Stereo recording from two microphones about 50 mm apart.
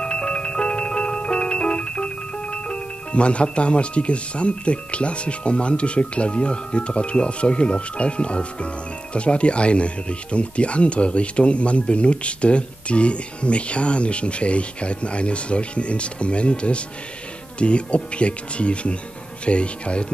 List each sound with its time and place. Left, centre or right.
0.0 s music: centre